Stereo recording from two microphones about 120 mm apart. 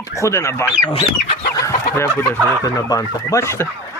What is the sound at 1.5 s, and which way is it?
Chicken, 25° left (ahead or behind).